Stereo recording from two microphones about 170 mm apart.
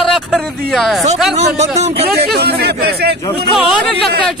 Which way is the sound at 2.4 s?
70° right (ahead or behind).